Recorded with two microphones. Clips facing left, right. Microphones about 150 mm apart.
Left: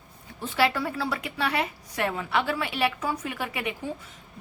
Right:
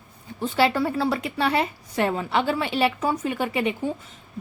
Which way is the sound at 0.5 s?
30° right (ahead or behind).